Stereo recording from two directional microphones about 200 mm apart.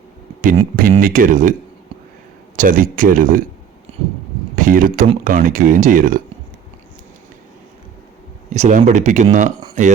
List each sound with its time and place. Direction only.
0.8 s speech: 45° right (ahead or behind)
2.6 s speech: 45° right (ahead or behind)
3.9 s a sound: 30° right (ahead or behind)
4.5 s speech: 40° right (ahead or behind)
8.4 s speech: 35° right (ahead or behind)